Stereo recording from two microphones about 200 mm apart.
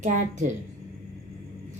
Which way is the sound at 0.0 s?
40° right (ahead or behind).